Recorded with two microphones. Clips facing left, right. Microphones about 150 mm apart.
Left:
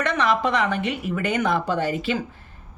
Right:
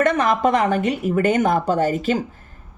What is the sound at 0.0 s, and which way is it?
A woman's voice, 45° right (ahead or behind).